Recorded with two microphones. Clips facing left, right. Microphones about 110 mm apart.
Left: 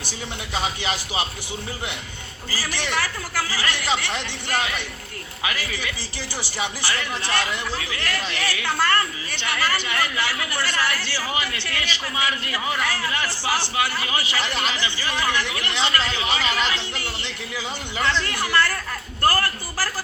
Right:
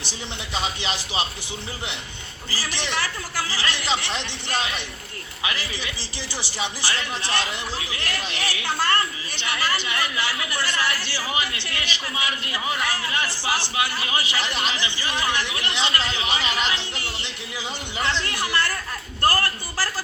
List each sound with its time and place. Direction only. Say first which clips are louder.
0.0 s speech: left 1 dB; 20° right (ahead or behind)
2.5 s speech: left 2 dB; 20° right (ahead or behind)